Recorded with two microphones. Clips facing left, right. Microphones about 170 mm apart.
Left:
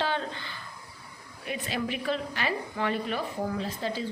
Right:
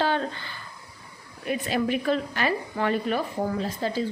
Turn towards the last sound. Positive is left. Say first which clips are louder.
# right 4 dB
turn(degrees=-45)  # may be behind; listen again after turning